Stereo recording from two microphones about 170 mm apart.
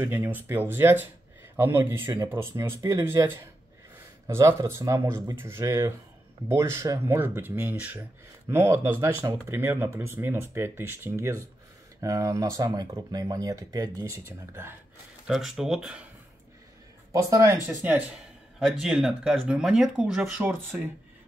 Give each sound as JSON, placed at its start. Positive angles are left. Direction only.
{"t": 0.0, "sound": "speech", "side_deg": -10}
{"t": 15.2, "sound": "speech", "side_deg": 0}
{"t": 17.1, "sound": "speech", "side_deg": -20}
{"t": 17.8, "sound": "speech", "side_deg": -10}